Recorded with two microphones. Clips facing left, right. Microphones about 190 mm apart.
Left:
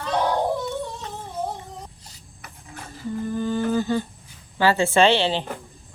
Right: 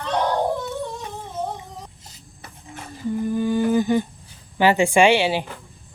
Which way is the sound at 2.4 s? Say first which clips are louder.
Right 1 dB; 25° right (ahead or behind).